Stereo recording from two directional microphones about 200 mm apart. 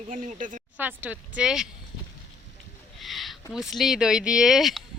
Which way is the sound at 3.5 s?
Centre (ahead or behind).